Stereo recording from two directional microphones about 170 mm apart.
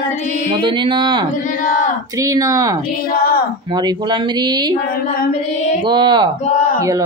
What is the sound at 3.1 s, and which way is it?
Speech, 60° left (ahead or behind).